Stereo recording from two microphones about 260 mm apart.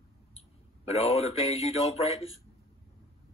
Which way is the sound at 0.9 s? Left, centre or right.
Left.